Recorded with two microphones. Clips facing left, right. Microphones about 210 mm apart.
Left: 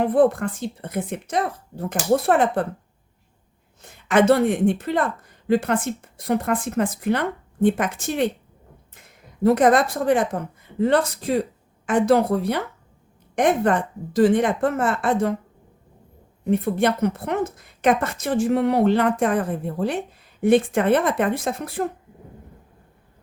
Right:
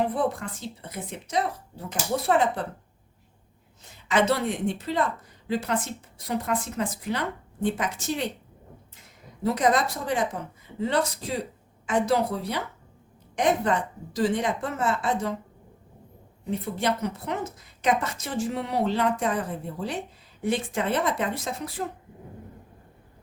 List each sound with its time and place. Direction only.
0.0 s a woman's voice: 55° left (ahead or behind)
3.8 s a woman's voice: 50° left (ahead or behind)
9.4 s a woman's voice: 55° left (ahead or behind)
16.4 s a woman's voice: 55° left (ahead or behind)